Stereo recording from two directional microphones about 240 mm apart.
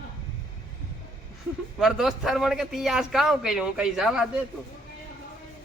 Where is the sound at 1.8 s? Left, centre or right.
Centre.